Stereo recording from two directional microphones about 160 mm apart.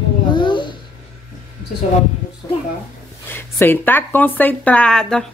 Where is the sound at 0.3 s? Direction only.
30° left (ahead or behind).